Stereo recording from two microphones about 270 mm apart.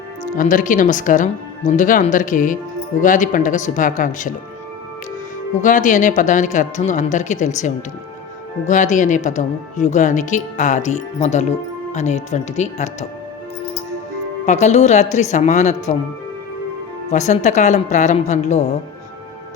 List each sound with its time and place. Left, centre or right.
0.3 s speech: left
5.6 s speech: left
14.4 s speech: left
17.1 s speech: left